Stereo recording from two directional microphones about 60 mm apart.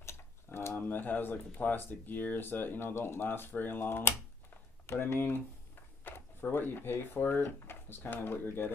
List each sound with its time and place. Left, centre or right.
0.0 s speech: left